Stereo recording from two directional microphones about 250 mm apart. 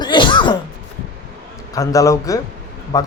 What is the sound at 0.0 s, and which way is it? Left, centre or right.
Cough, centre.